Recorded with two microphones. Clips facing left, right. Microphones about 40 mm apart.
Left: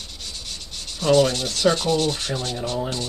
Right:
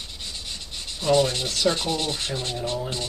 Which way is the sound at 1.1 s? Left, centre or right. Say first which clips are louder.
Left 3 dB; centre.